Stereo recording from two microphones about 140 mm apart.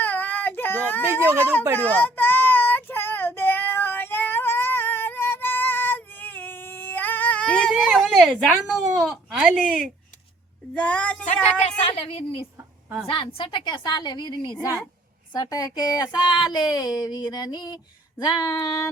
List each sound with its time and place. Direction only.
0.0 s baby cry: 10° left (ahead or behind)
1.2 s speech: 15° right (ahead or behind)
1.8 s child singing: 10° left (ahead or behind)
10.8 s speech: 10° left (ahead or behind)
11.9 s a woman's voice: 40° left (ahead or behind); by 18.9 s 25° left (ahead or behind)